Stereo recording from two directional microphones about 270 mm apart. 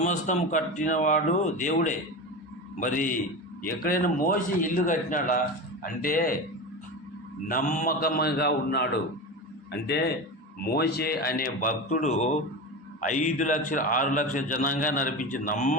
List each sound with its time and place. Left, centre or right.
0.0 s a man's voice: left
7.4 s a man's voice: left